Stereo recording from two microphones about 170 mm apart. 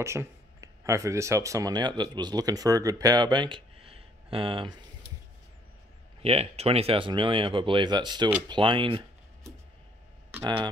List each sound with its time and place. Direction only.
0.0 s speech: 15° right (ahead or behind); by 4.7 s 30° right (ahead or behind)
6.2 s speech: 35° right (ahead or behind)
10.4 s speech: 25° right (ahead or behind)